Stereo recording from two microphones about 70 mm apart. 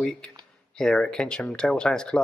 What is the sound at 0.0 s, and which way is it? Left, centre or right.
Speech, centre.